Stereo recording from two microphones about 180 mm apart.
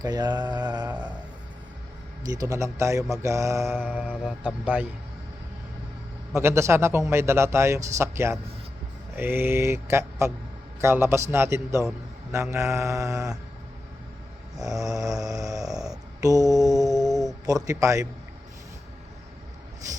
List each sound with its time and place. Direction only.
0.0 s mantra: 20° right (ahead or behind)
2.2 s a man's voice: 20° right (ahead or behind)
6.3 s a man's voice: 15° right (ahead or behind)
14.6 s snoring: 20° right (ahead or behind)
16.9 s mantra: centre (ahead or behind)
17.4 s mantra: 20° right (ahead or behind)